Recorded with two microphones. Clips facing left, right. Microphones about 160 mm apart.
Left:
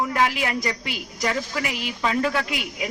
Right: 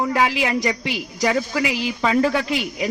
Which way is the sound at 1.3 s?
40° right (ahead or behind).